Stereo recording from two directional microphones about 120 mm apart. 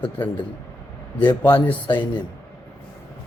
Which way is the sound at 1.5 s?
40° left (ahead or behind).